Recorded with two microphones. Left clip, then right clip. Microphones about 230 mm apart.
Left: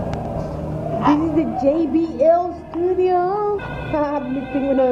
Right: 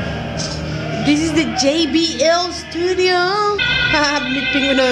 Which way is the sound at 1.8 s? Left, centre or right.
Centre.